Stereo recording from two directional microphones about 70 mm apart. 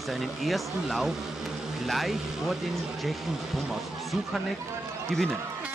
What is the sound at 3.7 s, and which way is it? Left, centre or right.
Speech, centre.